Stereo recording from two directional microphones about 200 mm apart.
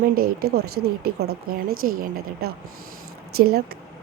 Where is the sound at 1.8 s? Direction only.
45° right (ahead or behind).